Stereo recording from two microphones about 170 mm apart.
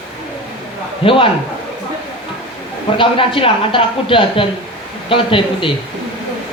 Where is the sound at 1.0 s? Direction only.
30° left (ahead or behind).